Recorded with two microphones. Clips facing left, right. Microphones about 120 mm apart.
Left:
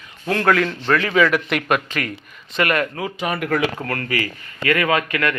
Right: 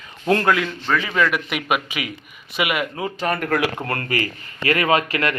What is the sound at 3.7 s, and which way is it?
A man's voice, 25° right (ahead or behind).